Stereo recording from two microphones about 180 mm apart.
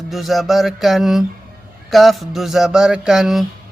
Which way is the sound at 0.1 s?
Centre (ahead or behind).